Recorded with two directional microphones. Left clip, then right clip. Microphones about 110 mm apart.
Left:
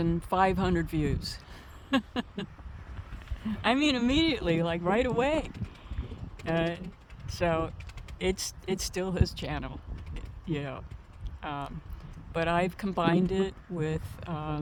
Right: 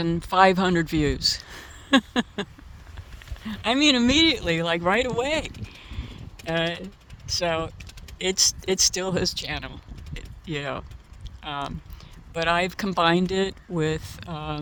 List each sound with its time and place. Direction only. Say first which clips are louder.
0.2 s speech: right 10 dB; 50° right (ahead or behind)
5.9 s typing: right 4 dB; 55° right (ahead or behind)
7.3 s speech: right 4 dB; 50° right (ahead or behind)
10.2 s a sound: right 4 dB; 50° right (ahead or behind)
11.4 s speech: right 5 dB; 45° right (ahead or behind)